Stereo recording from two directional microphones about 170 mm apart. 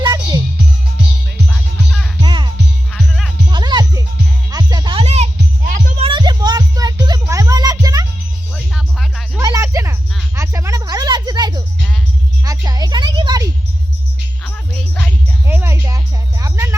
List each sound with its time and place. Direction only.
0.0 s music: 20° right (ahead or behind)
1.5 s music: 5° left (ahead or behind)
2.2 s music: 25° right (ahead or behind)
2.9 s music: centre (ahead or behind)
3.5 s music: 25° right (ahead or behind); by 5.9 s 50° right (ahead or behind)
6.0 s music: 30° right (ahead or behind)
8.5 s music: centre (ahead or behind)
9.4 s music: 20° right (ahead or behind)
12.5 s a sound: 20° right (ahead or behind)
14.4 s music: 5° left (ahead or behind)
15.4 s music: 15° right (ahead or behind)